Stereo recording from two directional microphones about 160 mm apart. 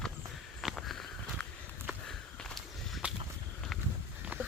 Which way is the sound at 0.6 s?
Centre (ahead or behind).